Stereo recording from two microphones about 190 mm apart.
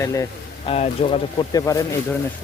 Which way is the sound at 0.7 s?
30° left (ahead or behind).